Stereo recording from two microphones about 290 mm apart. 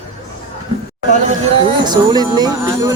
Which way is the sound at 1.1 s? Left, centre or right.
Right.